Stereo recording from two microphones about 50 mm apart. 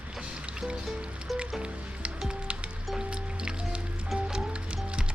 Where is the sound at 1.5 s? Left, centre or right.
Centre.